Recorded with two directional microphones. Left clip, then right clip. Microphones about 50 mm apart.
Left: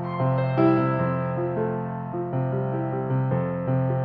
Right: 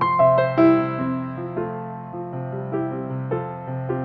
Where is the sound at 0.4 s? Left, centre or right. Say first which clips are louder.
Right 5 dB; centre.